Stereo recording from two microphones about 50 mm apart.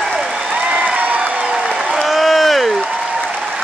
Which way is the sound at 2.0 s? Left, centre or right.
Centre.